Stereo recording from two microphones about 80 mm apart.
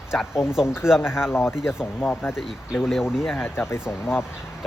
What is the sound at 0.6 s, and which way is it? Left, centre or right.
Speech, left.